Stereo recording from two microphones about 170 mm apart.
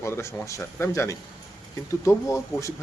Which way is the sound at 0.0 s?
15° left (ahead or behind).